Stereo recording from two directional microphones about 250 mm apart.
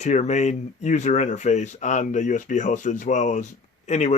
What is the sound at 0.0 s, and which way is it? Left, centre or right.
Speech, left.